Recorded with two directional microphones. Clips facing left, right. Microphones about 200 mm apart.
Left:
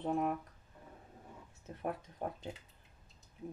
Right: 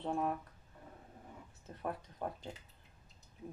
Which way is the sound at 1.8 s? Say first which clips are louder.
Left 2 dB; 20° left (ahead or behind).